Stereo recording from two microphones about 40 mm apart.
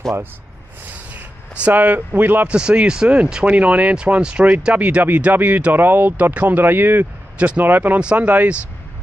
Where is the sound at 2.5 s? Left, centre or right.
Right.